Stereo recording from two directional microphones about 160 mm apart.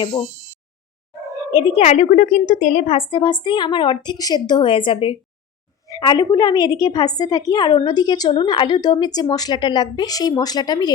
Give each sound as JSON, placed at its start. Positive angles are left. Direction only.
{"t": 1.3, "sound": "a woman's voice", "side_deg": 25}